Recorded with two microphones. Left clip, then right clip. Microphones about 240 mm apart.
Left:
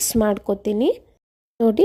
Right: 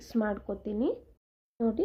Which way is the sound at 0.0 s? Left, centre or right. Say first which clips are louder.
Left 12 dB; left.